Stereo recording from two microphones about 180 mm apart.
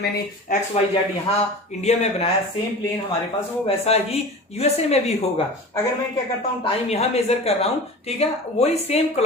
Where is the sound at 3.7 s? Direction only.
35° left (ahead or behind).